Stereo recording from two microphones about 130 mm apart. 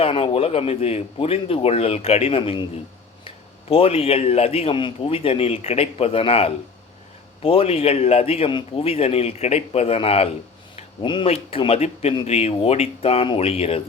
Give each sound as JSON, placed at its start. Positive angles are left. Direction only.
{"t": 0.0, "sound": "a man's voice", "side_deg": 45}